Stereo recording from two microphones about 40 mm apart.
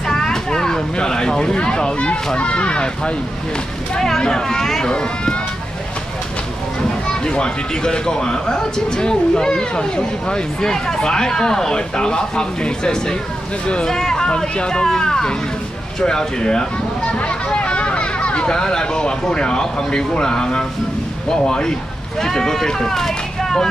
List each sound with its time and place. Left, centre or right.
0.0 s a sound: centre
2.3 s speech: left
4.2 s speech: centre
4.9 s speech: left
7.1 s speech: left